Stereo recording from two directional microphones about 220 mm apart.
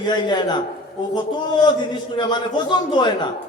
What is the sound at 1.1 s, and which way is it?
A man's voice, 20° left (ahead or behind).